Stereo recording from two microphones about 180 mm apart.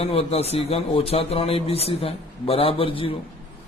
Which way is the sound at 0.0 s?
35° left (ahead or behind).